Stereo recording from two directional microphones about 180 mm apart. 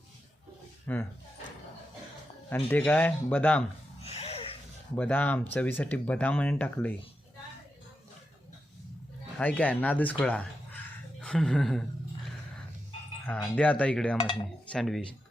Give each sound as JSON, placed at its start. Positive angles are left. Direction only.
{"t": 0.9, "sound": "speech", "side_deg": 10}
{"t": 2.6, "sound": "speech", "side_deg": 10}
{"t": 4.0, "sound": "a sound", "side_deg": 35}
{"t": 4.9, "sound": "speech", "side_deg": 10}
{"t": 9.4, "sound": "speech", "side_deg": 10}
{"t": 11.2, "sound": "a sound", "side_deg": 5}
{"t": 13.2, "sound": "cutlery", "side_deg": 5}